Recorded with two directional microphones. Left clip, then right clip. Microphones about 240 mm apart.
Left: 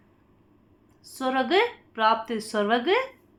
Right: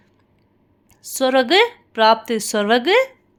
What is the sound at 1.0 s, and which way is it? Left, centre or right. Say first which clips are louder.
A woman's voice: right 9 dB; right.